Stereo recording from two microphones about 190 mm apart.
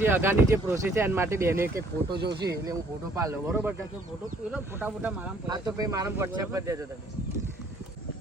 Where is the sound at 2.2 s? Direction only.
60° right (ahead or behind).